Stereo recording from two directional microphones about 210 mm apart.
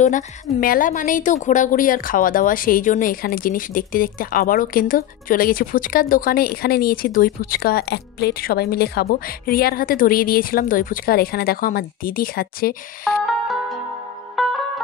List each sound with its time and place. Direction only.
0.0 s a woman's voice: 40° left (ahead or behind)
14.4 s music: centre (ahead or behind)